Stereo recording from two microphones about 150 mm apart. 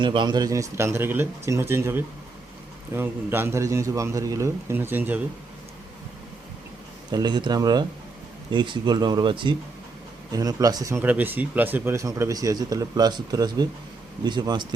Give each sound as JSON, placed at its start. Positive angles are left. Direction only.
{"t": 0.0, "sound": "speech", "side_deg": -30}
{"t": 7.1, "sound": "speech", "side_deg": -30}